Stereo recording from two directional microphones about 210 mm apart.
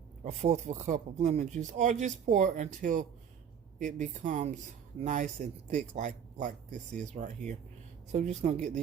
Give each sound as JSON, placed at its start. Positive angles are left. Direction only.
{"t": 0.3, "sound": "speech", "side_deg": -30}